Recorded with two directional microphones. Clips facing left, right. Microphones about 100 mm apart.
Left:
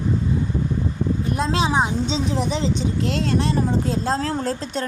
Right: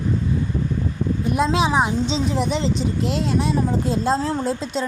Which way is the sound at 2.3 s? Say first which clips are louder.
Right 1 dB; centre (ahead or behind).